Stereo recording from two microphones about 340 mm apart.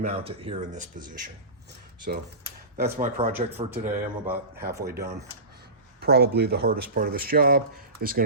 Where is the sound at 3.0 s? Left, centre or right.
Right.